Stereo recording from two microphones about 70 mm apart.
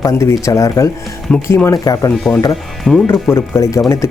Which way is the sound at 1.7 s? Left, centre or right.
Left.